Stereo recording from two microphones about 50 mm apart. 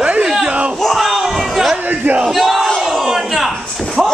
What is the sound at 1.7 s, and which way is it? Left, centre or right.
Speech, right.